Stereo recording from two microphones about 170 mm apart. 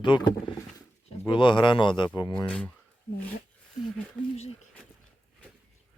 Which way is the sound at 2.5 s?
5° left (ahead or behind).